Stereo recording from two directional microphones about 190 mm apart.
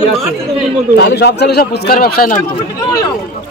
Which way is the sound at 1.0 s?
60° left (ahead or behind).